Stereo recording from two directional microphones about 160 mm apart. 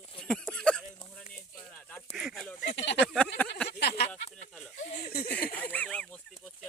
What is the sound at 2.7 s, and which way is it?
Speech, 90° left.